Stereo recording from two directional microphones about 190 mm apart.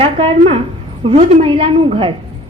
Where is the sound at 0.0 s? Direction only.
30° right (ahead or behind).